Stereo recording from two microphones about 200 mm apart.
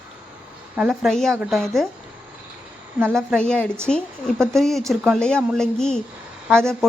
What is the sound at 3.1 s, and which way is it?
Speech, 5° left (ahead or behind).